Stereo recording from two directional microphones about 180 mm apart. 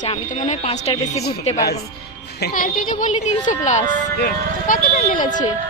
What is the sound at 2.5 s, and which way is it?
Speech, 45° left (ahead or behind).